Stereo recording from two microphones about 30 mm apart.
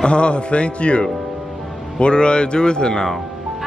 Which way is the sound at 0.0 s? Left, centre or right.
Left.